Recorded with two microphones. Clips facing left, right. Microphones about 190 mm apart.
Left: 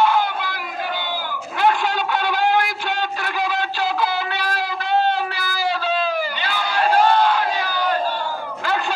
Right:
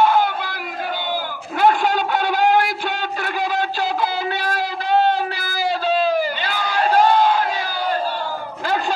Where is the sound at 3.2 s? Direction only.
45° right (ahead or behind).